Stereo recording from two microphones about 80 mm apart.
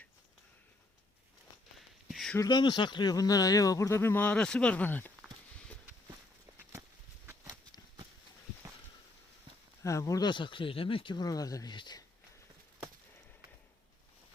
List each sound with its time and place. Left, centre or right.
2.0 s a sound: centre
2.5 s speech: left
9.8 s speech: left
10.2 s speech: left